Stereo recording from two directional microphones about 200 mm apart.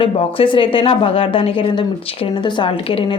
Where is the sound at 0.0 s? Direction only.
25° left (ahead or behind).